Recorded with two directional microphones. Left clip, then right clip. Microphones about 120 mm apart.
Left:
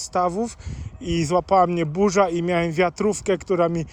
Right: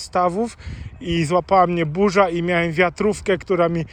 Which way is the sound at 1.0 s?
60° left (ahead or behind).